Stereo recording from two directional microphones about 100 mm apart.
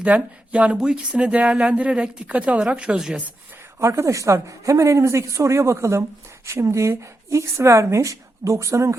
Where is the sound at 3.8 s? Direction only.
25° right (ahead or behind).